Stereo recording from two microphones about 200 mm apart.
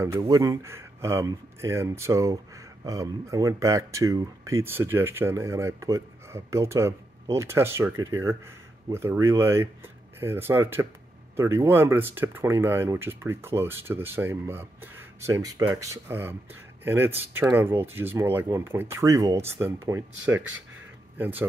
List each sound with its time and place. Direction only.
0.0 s speech: 15° right (ahead or behind)